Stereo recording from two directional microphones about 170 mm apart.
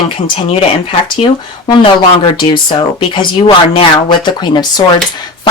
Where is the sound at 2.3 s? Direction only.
30° left (ahead or behind).